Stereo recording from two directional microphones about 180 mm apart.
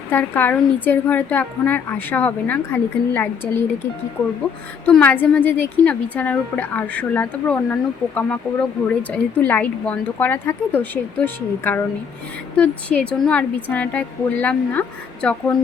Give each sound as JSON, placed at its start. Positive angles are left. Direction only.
{"t": 0.1, "sound": "a woman's voice", "side_deg": 10}
{"t": 4.9, "sound": "a woman's voice", "side_deg": 10}